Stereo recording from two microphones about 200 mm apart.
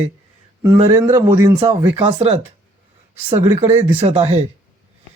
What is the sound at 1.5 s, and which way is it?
Speech, 25° right (ahead or behind).